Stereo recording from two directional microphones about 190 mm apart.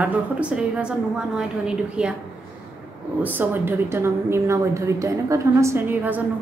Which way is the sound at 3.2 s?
10° right (ahead or behind).